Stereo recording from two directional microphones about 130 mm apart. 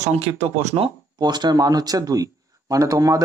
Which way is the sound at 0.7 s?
35° right (ahead or behind).